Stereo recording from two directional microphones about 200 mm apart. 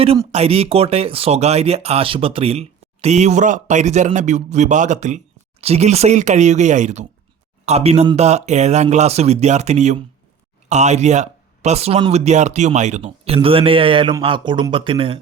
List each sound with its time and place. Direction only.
0.3 s speech: 30° right (ahead or behind)